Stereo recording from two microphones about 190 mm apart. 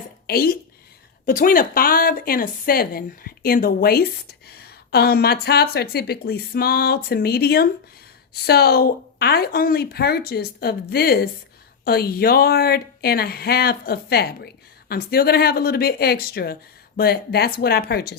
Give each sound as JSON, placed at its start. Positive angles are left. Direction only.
{"t": 0.3, "sound": "a woman's voice", "side_deg": 55}